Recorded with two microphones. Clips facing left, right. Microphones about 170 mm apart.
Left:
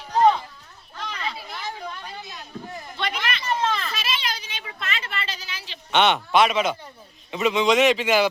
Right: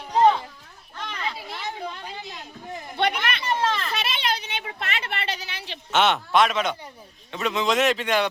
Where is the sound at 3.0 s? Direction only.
60° right (ahead or behind).